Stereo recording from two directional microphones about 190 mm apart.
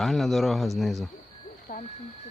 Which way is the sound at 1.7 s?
45° left (ahead or behind).